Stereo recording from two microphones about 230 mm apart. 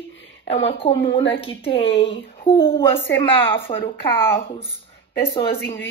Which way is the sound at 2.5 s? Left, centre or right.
Centre.